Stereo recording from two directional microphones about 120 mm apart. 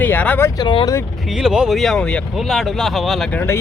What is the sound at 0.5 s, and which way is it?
Speech, 40° left (ahead or behind).